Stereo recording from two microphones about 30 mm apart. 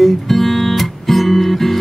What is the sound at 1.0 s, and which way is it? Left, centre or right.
Guitar, centre.